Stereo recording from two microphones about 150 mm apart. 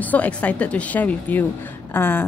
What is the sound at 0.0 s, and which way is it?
A woman's voice, 10° left (ahead or behind).